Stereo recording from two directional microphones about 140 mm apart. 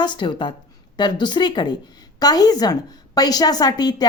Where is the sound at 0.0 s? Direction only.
35° left (ahead or behind).